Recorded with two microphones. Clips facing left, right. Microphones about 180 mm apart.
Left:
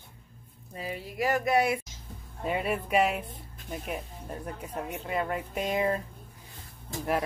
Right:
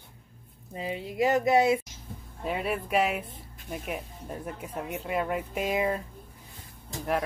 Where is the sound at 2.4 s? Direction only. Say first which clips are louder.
Left 1 dB; centre (ahead or behind).